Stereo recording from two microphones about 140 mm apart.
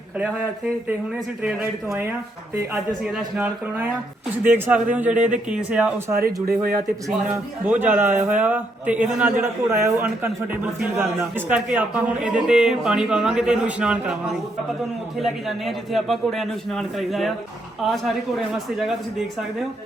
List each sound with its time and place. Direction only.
3.1 s a man's voice: 5° right (ahead or behind)
6.1 s speech: 90° right
7.6 s a man's voice: 15° right (ahead or behind)
15.2 s a man's voice: centre (ahead or behind)